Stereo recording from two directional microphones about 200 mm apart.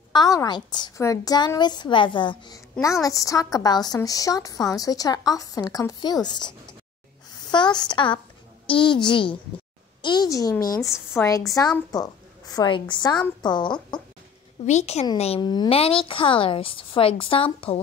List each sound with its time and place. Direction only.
0.1 s a woman's voice: 20° left (ahead or behind)
7.5 s a woman's voice: 20° left (ahead or behind)
14.7 s a woman's voice: 35° left (ahead or behind)